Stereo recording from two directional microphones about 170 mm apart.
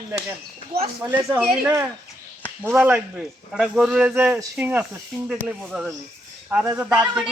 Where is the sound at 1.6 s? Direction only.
15° right (ahead or behind).